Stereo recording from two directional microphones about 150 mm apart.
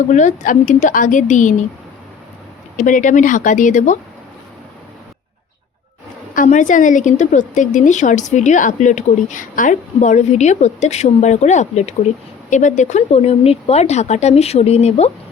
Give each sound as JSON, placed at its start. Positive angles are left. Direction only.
{"t": 0.1, "sound": "a woman's voice", "side_deg": 55}
{"t": 2.7, "sound": "a woman's voice", "side_deg": 60}
{"t": 6.3, "sound": "a woman's voice", "side_deg": 60}